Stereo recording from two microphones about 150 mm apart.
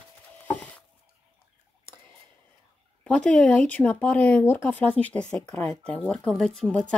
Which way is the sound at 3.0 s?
5° left (ahead or behind).